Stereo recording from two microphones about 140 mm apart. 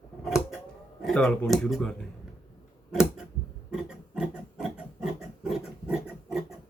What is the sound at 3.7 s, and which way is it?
Pig, 5° right (ahead or behind).